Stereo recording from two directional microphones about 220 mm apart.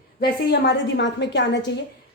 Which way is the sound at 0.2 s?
50° left (ahead or behind).